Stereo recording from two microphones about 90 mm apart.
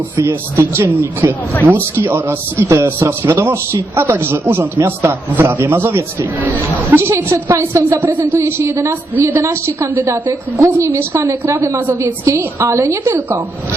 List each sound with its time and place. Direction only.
0.2 s a woman's voice: 30° right (ahead or behind)